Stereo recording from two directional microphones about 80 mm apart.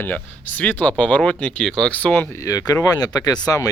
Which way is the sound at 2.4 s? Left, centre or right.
Left.